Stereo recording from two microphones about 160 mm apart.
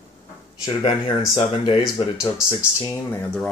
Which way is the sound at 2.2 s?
20° left (ahead or behind).